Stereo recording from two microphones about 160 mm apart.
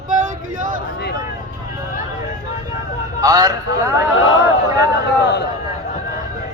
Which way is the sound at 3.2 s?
20° right (ahead or behind).